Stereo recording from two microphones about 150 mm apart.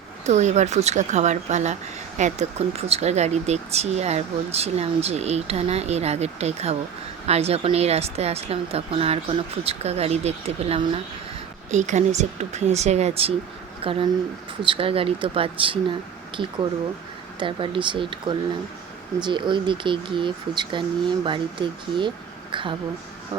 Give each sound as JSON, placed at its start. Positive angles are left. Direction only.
{"t": 0.3, "sound": "speech", "side_deg": -50}
{"t": 11.7, "sound": "speech", "side_deg": -50}
{"t": 17.4, "sound": "speech", "side_deg": -35}